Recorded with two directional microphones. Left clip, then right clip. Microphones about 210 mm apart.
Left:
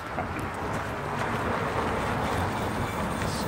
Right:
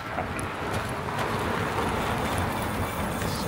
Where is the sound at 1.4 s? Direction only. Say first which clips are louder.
Even; 50° right (ahead or behind).